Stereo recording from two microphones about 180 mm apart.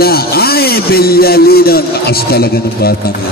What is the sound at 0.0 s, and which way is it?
A man's voice, 60° left (ahead or behind).